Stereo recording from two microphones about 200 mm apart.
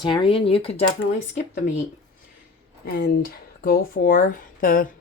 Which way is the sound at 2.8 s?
50° left (ahead or behind).